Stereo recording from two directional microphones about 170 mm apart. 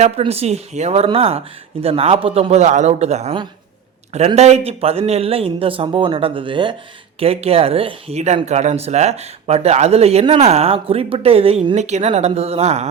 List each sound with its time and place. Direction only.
0.0 s speech: 35° right (ahead or behind)
4.4 s speech: 40° right (ahead or behind)